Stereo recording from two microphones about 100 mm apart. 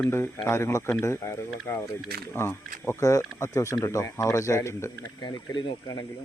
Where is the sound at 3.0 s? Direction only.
35° left (ahead or behind).